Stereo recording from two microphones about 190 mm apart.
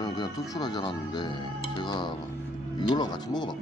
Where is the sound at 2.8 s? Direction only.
20° left (ahead or behind).